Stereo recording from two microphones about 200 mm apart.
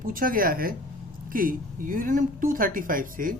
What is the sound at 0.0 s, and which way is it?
A woman's voice, 45° right (ahead or behind).